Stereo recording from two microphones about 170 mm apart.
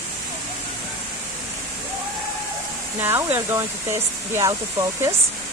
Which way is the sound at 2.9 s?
15° right (ahead or behind).